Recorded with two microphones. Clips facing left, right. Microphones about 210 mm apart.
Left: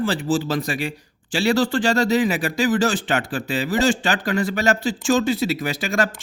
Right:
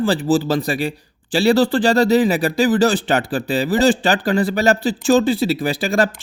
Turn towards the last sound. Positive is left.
turn(degrees=-35)  # may be behind; listen again after turning